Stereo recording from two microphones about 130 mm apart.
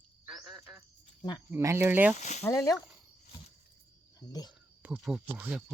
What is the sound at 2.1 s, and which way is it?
Speech, 65° left (ahead or behind).